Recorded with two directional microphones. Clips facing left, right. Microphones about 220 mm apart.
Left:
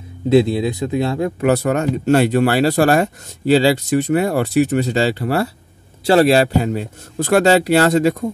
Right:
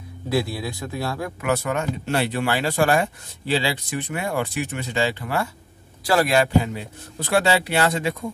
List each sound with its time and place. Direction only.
0.3 s speech: 20° left (ahead or behind)
1.5 s speech: 40° left (ahead or behind)